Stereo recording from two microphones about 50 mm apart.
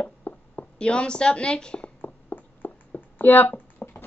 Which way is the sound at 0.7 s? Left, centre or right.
Centre.